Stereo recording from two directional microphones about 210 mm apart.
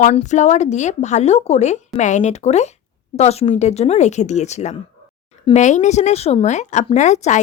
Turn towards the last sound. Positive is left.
turn(degrees=35)  # may be behind; listen again after turning